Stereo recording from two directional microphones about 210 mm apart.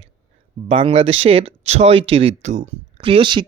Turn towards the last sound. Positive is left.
turn(degrees=-25)  # may be behind; listen again after turning